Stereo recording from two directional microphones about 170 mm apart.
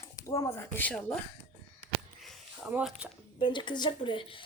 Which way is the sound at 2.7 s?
5° right (ahead or behind).